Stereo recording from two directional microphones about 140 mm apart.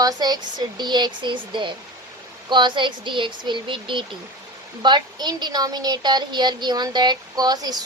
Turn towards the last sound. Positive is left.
turn(degrees=-30)  # may be behind; listen again after turning